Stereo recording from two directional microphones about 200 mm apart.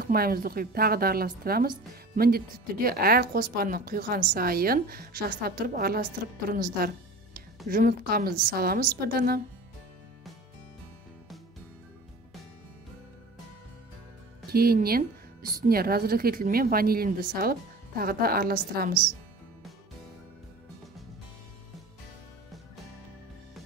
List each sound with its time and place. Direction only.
0.0 s a woman's voice: 50° right (ahead or behind)
14.5 s a woman's voice: 50° right (ahead or behind)